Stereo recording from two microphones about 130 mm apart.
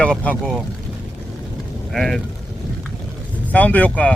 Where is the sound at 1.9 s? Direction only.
Centre (ahead or behind).